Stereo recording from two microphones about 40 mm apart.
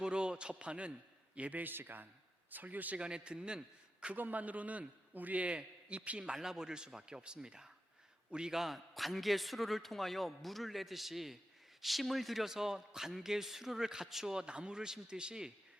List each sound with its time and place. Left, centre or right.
0.0 s a man's voice: right
1.6 s a man's voice: right
2.5 s a man's voice: right
3.0 s a man's voice: right
4.1 s a man's voice: right
6.3 s a man's voice: centre
8.5 s a man's voice: centre
14.4 s a man's voice: right